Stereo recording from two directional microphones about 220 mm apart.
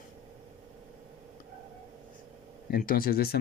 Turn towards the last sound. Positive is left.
turn(degrees=45)  # may be behind; listen again after turning